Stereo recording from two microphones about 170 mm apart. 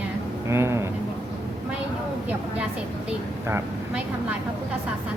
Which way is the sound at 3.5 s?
10° right (ahead or behind).